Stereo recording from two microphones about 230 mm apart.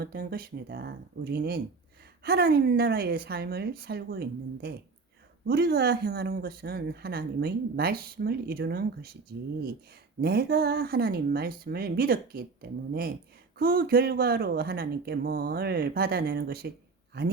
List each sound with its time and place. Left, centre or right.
0.0 s speech: right
10.2 s speech: right